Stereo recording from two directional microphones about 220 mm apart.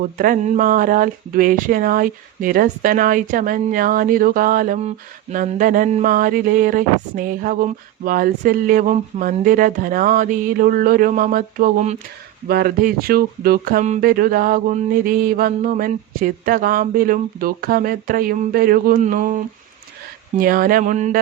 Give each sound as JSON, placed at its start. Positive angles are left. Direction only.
{"t": 0.0, "sound": "speech", "side_deg": -40}
{"t": 20.4, "sound": "speech", "side_deg": -40}